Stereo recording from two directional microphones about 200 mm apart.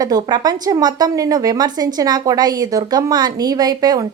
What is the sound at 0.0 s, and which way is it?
Speech, 20° right (ahead or behind).